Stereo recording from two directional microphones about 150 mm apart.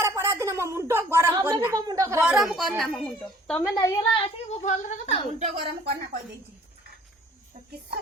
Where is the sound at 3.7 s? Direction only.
25° left (ahead or behind).